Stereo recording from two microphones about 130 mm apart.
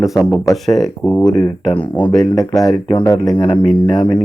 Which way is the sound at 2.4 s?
30° left (ahead or behind).